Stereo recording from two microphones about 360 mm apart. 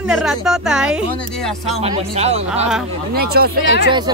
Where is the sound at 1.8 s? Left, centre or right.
Centre.